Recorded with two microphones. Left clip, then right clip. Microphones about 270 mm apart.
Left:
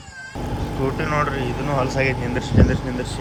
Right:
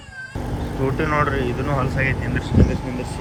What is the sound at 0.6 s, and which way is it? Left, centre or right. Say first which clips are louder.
Speech: right 2 dB; centre.